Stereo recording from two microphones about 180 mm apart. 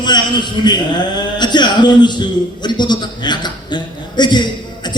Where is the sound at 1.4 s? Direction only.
25° left (ahead or behind).